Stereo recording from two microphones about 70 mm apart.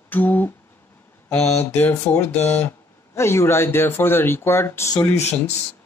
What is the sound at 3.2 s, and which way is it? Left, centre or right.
Speech, left.